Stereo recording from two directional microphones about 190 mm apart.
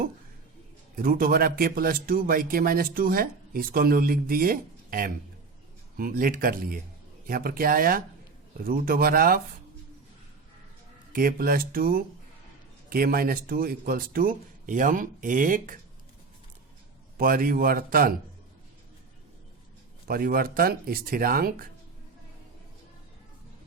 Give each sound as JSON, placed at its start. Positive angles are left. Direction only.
{"t": 0.9, "sound": "a man's voice", "side_deg": -50}
{"t": 11.1, "sound": "a man's voice", "side_deg": -50}
{"t": 17.2, "sound": "a man's voice", "side_deg": -50}
{"t": 20.1, "sound": "a man's voice", "side_deg": -50}